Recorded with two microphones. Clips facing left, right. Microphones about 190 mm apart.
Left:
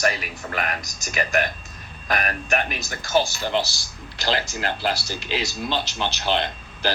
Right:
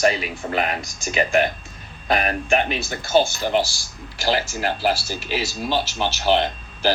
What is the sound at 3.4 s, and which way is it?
Speech, 15° right (ahead or behind).